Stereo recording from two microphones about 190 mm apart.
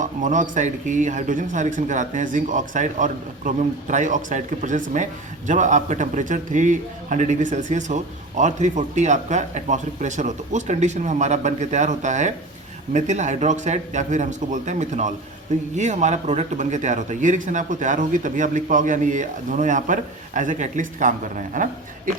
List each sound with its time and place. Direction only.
0.0 s a man's voice: 40° right (ahead or behind)